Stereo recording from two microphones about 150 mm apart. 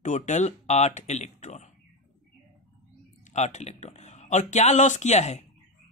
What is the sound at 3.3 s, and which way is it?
Speech, 50° left (ahead or behind).